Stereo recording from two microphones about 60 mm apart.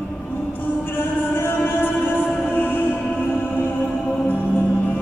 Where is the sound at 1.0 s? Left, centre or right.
Left.